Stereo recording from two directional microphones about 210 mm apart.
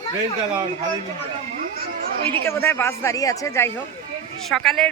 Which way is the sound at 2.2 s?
30° right (ahead or behind).